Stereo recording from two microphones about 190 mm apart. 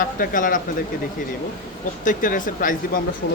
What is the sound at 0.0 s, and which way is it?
Speech, 45° left (ahead or behind).